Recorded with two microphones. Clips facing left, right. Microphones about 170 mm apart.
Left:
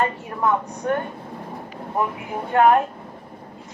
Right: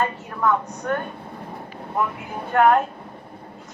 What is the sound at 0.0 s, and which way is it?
Speech, 20° left (ahead or behind).